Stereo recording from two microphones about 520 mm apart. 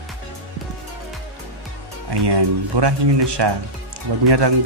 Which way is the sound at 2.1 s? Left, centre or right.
Right.